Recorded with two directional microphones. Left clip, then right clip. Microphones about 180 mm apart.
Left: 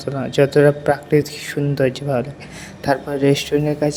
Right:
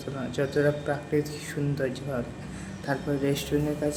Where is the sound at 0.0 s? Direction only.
45° left (ahead or behind).